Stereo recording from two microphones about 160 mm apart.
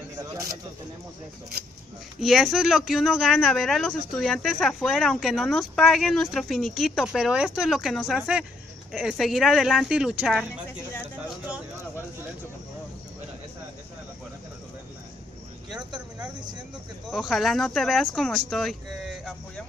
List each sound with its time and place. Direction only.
2.1 s speech: centre (ahead or behind)
15.7 s speech: 5° right (ahead or behind)